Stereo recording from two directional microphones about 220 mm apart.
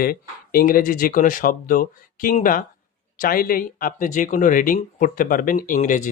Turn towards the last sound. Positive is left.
turn(degrees=35)  # may be behind; listen again after turning